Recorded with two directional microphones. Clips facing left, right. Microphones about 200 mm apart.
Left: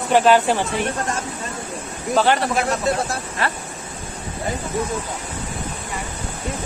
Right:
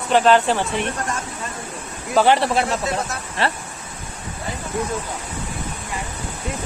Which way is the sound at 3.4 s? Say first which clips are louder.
Right 3 dB; 30° right (ahead or behind).